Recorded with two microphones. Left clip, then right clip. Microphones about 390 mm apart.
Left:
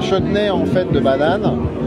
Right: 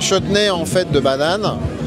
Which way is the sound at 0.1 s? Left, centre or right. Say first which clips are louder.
Right 1 dB; right.